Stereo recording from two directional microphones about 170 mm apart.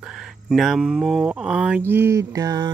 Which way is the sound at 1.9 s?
15° right (ahead or behind).